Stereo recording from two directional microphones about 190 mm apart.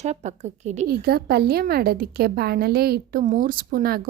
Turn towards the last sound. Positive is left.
turn(degrees=-50)  # may be behind; listen again after turning